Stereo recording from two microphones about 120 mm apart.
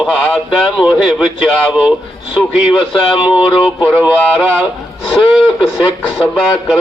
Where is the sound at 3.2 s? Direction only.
10° right (ahead or behind).